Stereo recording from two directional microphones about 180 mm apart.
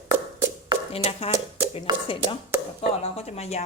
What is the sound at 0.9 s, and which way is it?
Speech, 35° left (ahead or behind).